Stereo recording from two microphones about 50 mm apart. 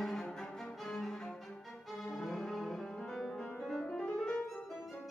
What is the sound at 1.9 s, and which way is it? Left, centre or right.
Brass instrument, centre.